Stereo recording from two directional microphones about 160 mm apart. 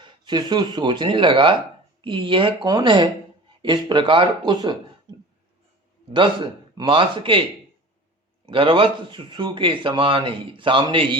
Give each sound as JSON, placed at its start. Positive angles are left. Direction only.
{"t": 0.0, "sound": "speech", "side_deg": -30}
{"t": 6.1, "sound": "speech", "side_deg": -30}
{"t": 8.4, "sound": "speech", "side_deg": -30}